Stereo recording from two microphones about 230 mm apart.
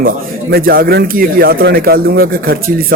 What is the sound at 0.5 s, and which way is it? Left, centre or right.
A man's voice, right.